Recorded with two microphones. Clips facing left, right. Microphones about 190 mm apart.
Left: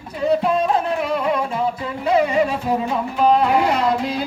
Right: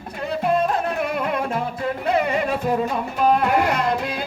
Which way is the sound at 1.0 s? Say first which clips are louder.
Left 3 dB; 55° right (ahead or behind).